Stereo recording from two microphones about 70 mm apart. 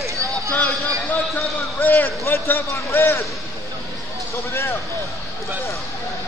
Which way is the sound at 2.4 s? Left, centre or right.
Left.